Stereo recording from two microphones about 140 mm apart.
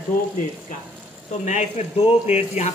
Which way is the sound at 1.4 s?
55° left (ahead or behind).